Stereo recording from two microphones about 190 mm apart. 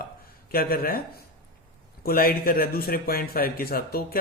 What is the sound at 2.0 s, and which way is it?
Speech, 50° left (ahead or behind).